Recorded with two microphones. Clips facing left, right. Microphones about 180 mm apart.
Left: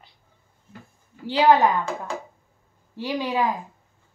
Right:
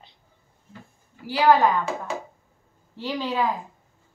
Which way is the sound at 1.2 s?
20° left (ahead or behind).